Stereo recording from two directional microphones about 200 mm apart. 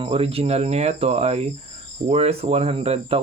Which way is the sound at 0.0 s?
30° right (ahead or behind).